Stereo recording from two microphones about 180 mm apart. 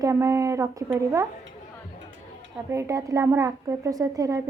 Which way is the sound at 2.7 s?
20° right (ahead or behind).